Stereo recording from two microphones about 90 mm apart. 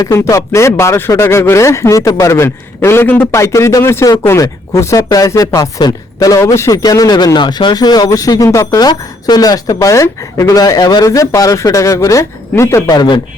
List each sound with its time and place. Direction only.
0.0 s speech: 35° left (ahead or behind)
6.4 s speech: 30° left (ahead or behind)
7.3 s speech: 55° left (ahead or behind)
9.7 s speech: 35° left (ahead or behind)
12.9 s a man's voice: 55° left (ahead or behind)